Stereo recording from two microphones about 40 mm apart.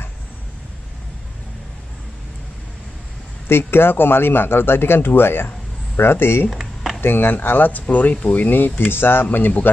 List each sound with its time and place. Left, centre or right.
3.4 s speech: left
6.5 s a sound: centre
7.0 s speech: left
7.8 s speech: left
8.5 s speech: left